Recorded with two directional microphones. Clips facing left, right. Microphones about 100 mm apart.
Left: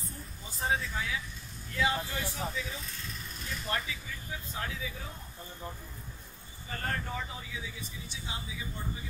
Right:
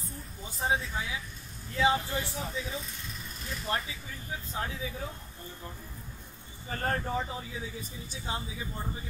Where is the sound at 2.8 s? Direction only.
Centre (ahead or behind).